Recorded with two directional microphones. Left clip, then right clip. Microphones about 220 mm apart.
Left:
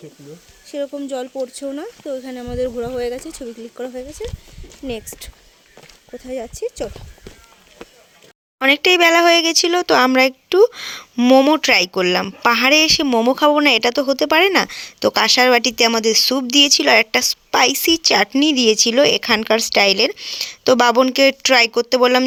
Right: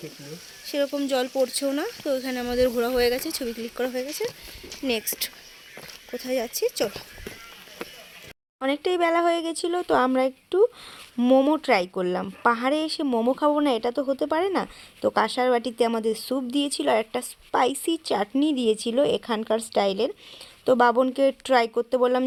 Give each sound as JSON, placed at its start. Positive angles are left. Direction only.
{"t": 0.7, "sound": "speech", "side_deg": 0}
{"t": 8.8, "sound": "a woman's voice", "side_deg": 30}